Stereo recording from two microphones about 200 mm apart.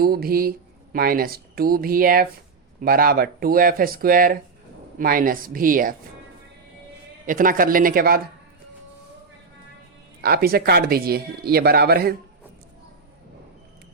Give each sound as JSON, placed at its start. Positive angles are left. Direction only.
{"t": 0.0, "sound": "speech", "side_deg": -50}
{"t": 7.3, "sound": "speech", "side_deg": -40}
{"t": 10.2, "sound": "speech", "side_deg": -50}